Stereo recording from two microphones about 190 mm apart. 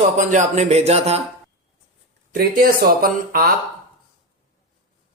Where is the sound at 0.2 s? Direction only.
40° right (ahead or behind).